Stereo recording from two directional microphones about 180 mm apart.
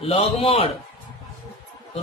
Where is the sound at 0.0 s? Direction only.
35° left (ahead or behind).